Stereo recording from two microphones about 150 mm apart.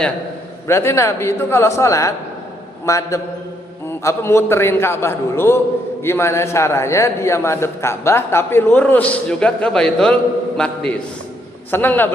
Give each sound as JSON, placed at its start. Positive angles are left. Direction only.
{"t": 0.7, "sound": "a man's voice", "side_deg": 15}